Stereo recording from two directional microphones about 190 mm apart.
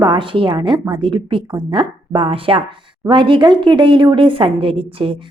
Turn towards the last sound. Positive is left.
turn(degrees=-30)  # may be behind; listen again after turning